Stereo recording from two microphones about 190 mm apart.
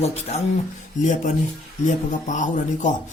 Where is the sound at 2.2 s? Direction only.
40° left (ahead or behind).